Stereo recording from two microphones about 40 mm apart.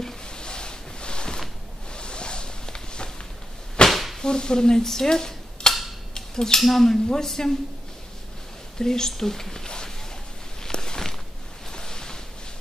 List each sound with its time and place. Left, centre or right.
0.0 s a sound: left
3.9 s whip: centre
4.2 s speech: centre
6.1 s cutlery: centre
6.6 s speech: centre
8.7 s speech: centre
10.6 s a sound: centre